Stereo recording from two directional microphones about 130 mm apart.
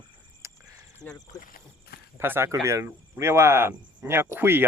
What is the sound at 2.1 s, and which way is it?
Speech, 20° right (ahead or behind).